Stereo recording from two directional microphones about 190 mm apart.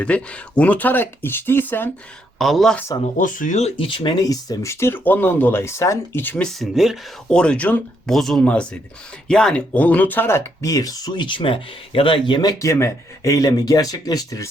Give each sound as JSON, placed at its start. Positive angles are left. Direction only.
{"t": 0.0, "sound": "speech", "side_deg": 5}
{"t": 3.0, "sound": "speech", "side_deg": 45}